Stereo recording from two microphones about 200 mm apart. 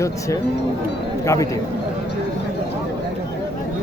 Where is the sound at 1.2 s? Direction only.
15° left (ahead or behind).